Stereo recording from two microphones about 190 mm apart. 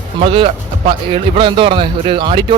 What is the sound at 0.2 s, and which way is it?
Speech, 25° right (ahead or behind).